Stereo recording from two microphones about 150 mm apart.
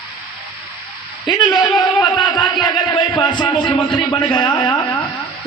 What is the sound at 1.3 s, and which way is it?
A man's voice, 30° left (ahead or behind).